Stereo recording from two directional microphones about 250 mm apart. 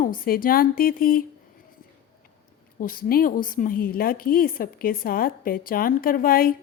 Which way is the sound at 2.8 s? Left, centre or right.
Left.